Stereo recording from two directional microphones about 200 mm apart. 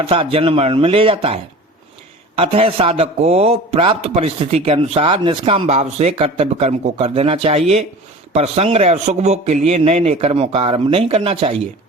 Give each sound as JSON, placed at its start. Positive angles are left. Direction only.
{"t": 0.0, "sound": "a man's voice", "side_deg": -25}